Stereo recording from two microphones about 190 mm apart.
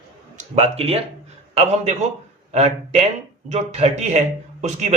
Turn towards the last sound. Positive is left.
turn(degrees=-35)  # may be behind; listen again after turning